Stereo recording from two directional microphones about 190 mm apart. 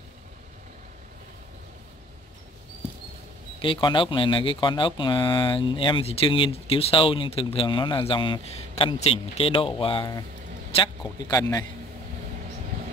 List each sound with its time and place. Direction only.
3.6 s speech: 25° left (ahead or behind)